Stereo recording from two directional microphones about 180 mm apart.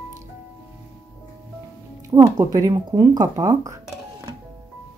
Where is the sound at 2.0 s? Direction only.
20° right (ahead or behind).